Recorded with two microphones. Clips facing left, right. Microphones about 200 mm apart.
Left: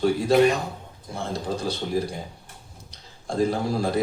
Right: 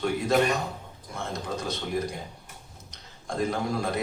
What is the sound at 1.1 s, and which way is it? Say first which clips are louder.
Speech: left 4 dB; 30° left (ahead or behind).